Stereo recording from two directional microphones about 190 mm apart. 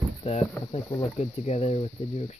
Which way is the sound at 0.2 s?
35° left (ahead or behind).